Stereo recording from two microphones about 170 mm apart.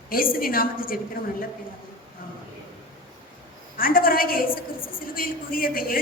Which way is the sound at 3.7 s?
55° left (ahead or behind).